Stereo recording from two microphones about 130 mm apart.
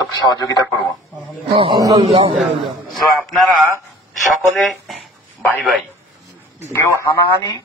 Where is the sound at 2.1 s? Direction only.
45° right (ahead or behind).